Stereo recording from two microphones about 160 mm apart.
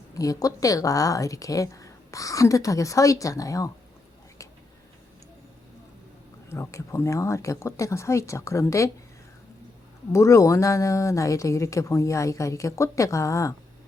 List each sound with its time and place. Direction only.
0.1 s a woman's voice: 20° left (ahead or behind)
6.5 s a woman's voice: 20° left (ahead or behind)
10.1 s a woman's voice: 20° left (ahead or behind)